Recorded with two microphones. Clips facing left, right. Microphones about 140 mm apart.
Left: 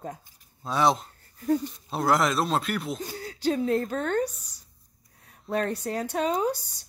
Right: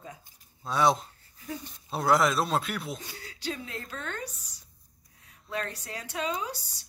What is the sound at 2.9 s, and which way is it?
Speech, 45° left (ahead or behind).